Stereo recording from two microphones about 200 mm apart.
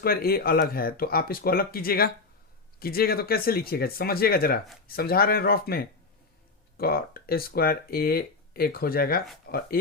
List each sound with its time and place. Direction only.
0.0 s speech: 50° left (ahead or behind)